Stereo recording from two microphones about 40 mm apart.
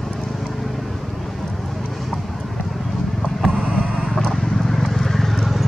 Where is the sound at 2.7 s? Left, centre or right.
Centre.